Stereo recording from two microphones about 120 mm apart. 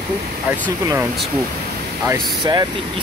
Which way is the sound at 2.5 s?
40° right (ahead or behind).